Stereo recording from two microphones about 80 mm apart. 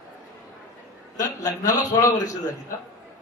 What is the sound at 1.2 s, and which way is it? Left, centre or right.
A man's voice, left.